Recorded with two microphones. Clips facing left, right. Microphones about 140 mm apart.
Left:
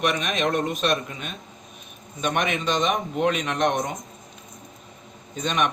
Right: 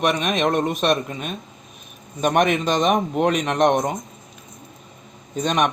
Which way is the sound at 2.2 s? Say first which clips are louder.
Right 6 dB; 45° right (ahead or behind).